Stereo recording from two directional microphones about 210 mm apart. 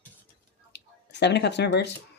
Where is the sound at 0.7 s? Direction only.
55° left (ahead or behind).